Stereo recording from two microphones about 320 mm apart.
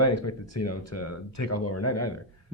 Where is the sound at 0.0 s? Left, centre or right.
Left.